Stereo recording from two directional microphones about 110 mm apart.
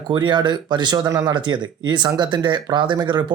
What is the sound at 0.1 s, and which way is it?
Speech, 45° right (ahead or behind).